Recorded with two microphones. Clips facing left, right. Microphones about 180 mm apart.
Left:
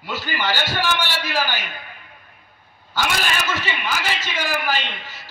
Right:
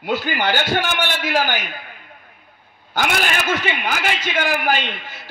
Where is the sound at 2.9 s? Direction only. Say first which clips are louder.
Right 3 dB; 55° right (ahead or behind).